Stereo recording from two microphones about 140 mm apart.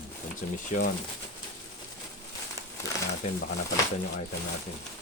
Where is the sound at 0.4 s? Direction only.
65° left (ahead or behind).